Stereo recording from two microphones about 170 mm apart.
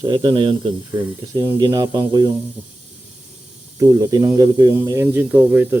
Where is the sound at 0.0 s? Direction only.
30° right (ahead or behind).